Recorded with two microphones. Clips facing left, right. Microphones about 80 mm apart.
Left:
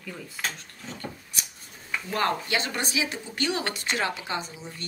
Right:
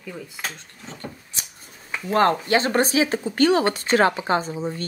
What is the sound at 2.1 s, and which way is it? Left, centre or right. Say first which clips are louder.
Speech: right 8 dB; right.